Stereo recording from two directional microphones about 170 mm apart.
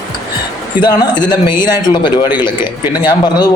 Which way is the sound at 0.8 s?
25° left (ahead or behind).